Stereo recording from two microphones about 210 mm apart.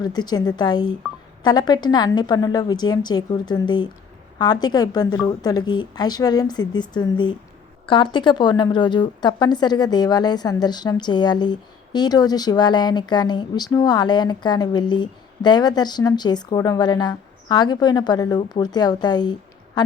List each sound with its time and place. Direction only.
0.0 s a woman's voice: 20° left (ahead or behind)
1.0 s telephone dialing: 5° right (ahead or behind)
1.5 s a woman's voice: 20° left (ahead or behind)